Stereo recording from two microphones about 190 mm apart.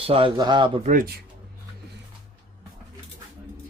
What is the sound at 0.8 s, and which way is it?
Speech, 45° right (ahead or behind).